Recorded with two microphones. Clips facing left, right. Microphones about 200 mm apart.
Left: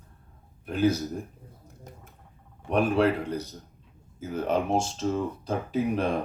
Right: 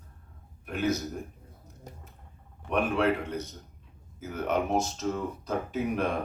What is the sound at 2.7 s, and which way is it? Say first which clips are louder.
Speech: left 3 dB; 30° left (ahead or behind).